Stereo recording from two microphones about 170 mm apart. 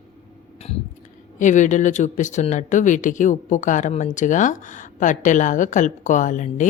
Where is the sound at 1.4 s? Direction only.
45° left (ahead or behind).